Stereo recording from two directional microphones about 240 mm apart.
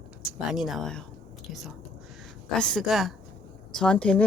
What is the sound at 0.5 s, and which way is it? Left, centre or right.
A woman's voice, centre.